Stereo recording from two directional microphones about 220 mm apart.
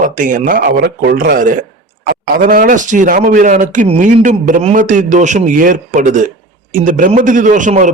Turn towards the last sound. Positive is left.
turn(degrees=-35)  # may be behind; listen again after turning